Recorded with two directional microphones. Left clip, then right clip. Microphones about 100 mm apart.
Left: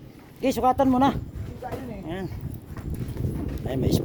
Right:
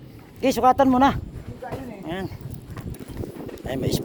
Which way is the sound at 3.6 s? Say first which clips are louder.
Even; 20° left (ahead or behind).